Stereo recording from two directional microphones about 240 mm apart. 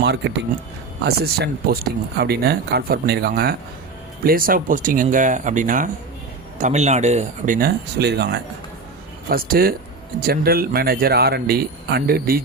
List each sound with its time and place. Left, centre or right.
0.0 s speech: right